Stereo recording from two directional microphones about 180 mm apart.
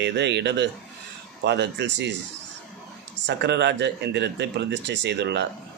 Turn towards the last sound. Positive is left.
turn(degrees=-70)  # may be behind; listen again after turning